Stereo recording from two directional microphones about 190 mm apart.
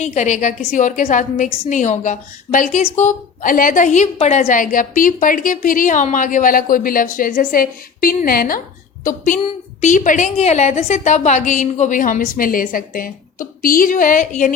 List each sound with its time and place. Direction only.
0.0 s a woman's voice: 35° left (ahead or behind)